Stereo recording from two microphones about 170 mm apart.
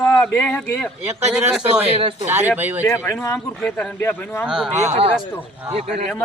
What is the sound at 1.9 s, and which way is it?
Speech, 35° right (ahead or behind).